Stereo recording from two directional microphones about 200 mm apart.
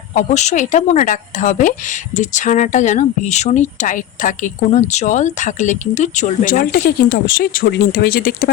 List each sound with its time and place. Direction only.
0.1 s speech: 35° left (ahead or behind)